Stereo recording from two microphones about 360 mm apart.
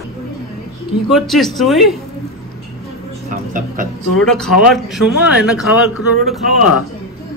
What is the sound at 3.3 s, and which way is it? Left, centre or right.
Speech, right.